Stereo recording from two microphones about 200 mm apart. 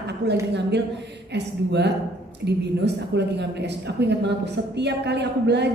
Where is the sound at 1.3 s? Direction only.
60° right (ahead or behind).